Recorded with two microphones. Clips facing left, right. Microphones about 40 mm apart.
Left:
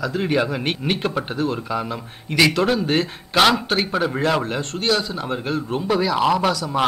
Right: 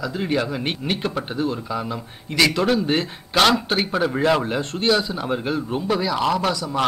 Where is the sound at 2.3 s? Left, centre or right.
Centre.